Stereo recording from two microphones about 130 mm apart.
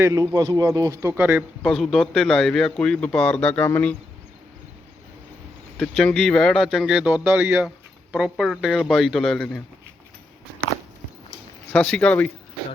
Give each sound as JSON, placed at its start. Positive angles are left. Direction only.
{"t": 0.0, "sound": "speech", "side_deg": -25}
{"t": 1.6, "sound": "speech", "side_deg": 0}
{"t": 5.7, "sound": "speech", "side_deg": 5}
{"t": 11.7, "sound": "speech", "side_deg": 10}